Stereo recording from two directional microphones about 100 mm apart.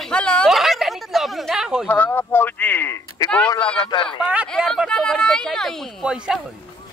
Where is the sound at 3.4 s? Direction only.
45° left (ahead or behind).